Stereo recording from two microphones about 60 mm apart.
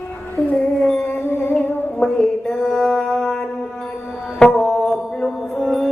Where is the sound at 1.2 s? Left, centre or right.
Left.